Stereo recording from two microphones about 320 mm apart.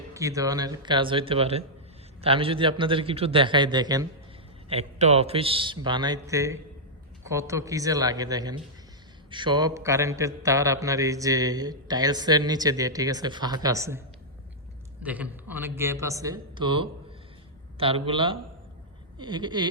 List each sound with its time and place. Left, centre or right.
0.1 s speech: centre
15.0 s speech: centre